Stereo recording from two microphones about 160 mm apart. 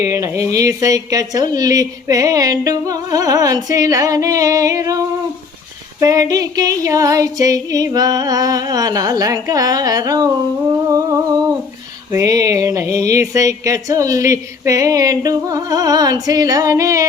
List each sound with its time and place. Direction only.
0.0 s speech: 20° right (ahead or behind)